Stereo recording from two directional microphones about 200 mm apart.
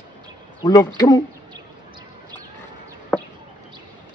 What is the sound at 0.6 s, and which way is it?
Speech, 20° left (ahead or behind).